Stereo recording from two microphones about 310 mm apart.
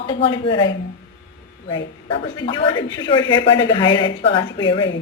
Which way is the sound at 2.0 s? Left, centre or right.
Centre.